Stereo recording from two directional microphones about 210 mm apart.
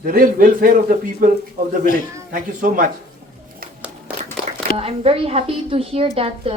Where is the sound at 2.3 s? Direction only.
40° right (ahead or behind).